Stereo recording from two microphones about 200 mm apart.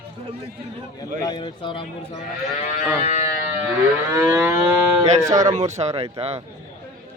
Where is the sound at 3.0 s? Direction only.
35° left (ahead or behind).